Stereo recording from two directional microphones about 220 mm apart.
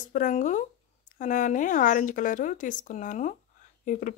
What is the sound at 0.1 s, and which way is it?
Speech, 35° left (ahead or behind).